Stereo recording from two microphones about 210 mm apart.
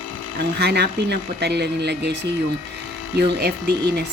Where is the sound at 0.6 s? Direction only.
50° right (ahead or behind).